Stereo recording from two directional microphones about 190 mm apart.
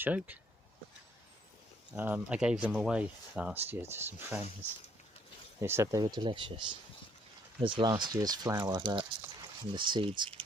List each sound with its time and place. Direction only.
0.0 s speech: 10° right (ahead or behind)
1.9 s speech: 10° right (ahead or behind)
5.5 s speech: 15° right (ahead or behind)